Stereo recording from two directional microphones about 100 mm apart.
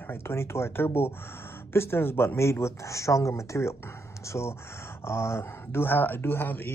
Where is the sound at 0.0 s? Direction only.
25° left (ahead or behind).